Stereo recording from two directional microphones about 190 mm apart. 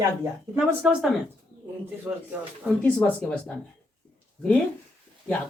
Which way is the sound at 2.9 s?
10° left (ahead or behind).